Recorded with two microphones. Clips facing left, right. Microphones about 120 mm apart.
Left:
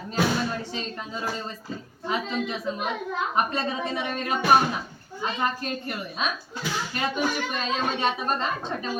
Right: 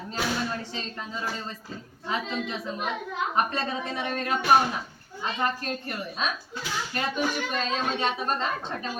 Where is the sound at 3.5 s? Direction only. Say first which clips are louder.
Left 2 dB; 15° left (ahead or behind).